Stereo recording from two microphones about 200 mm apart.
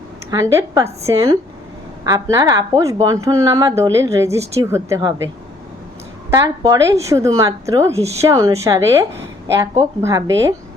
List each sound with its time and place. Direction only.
0.3 s speech: 15° right (ahead or behind)
6.3 s speech: 15° right (ahead or behind)